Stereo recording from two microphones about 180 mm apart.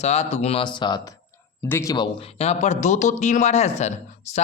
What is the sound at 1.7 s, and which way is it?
Speech, 15° left (ahead or behind).